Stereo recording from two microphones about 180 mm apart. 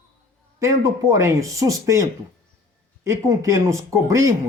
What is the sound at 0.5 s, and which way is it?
Speech, 20° right (ahead or behind).